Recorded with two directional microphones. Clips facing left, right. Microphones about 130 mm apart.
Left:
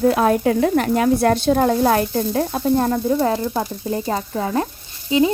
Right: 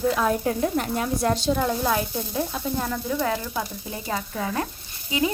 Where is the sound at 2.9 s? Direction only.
30° left (ahead or behind).